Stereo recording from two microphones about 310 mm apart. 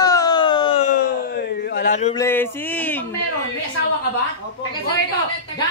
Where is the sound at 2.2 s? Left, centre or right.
Centre.